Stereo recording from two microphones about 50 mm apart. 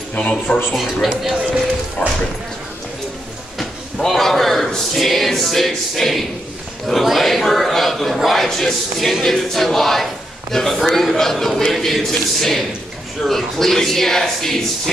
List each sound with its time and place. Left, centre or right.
0.1 s speech: left
2.0 s speech: centre
3.5 s a man's voice: centre